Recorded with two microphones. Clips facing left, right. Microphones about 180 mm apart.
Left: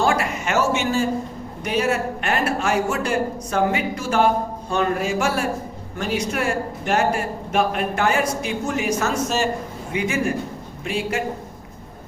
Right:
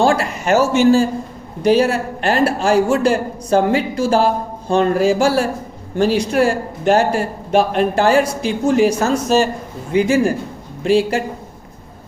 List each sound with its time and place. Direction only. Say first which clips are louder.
0.0 s a man's voice: right 5 dB; 35° right (ahead or behind)